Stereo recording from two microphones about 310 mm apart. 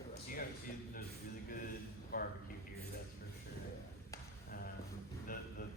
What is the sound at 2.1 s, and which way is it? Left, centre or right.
Speech, left.